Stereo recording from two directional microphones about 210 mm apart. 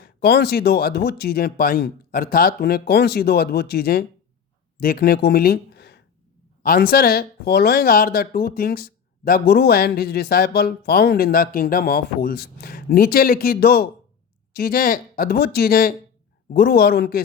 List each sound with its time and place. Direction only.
0.0 s speech: 50° left (ahead or behind)